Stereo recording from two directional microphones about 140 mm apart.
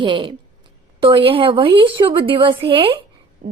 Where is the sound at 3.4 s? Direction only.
75° right (ahead or behind).